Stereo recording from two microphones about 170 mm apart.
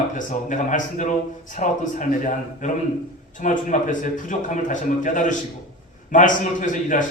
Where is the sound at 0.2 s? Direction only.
50° left (ahead or behind).